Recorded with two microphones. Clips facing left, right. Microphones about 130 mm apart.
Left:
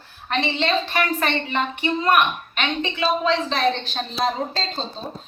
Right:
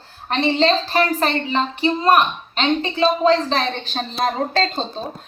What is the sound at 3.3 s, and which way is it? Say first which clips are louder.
A woman's voice: right 3 dB; 45° right (ahead or behind).